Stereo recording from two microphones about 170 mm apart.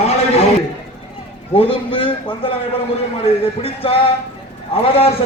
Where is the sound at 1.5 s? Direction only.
30° left (ahead or behind).